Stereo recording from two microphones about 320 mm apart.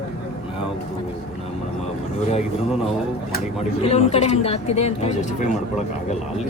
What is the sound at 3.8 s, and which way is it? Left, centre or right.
Speech, centre.